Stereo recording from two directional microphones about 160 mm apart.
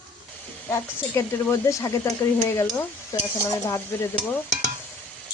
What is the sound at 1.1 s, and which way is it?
Speech, 15° left (ahead or behind).